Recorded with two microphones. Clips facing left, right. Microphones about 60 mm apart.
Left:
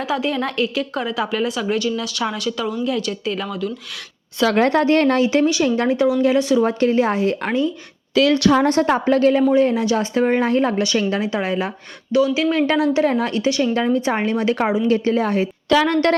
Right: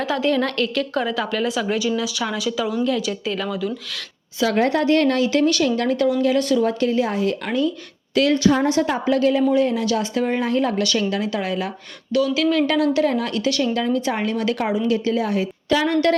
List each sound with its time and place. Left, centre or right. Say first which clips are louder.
0.0 s a woman's voice: right 1 dB; centre
4.4 s a woman's voice: left 2 dB; left
4.7 s a woman's voice: left 2 dB; left
6.6 s speech: left 3 dB; left
8.3 s a woman's voice: even; left
8.6 s a woman's voice: left 3 dB; left